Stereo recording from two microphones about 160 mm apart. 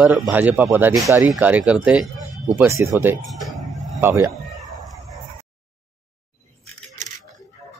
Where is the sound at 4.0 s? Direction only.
15° right (ahead or behind).